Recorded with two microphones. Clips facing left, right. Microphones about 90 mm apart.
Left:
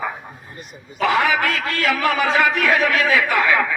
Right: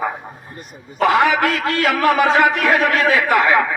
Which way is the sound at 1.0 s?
55° right (ahead or behind).